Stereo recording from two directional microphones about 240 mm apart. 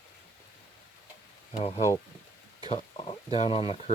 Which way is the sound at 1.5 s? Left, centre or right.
Left.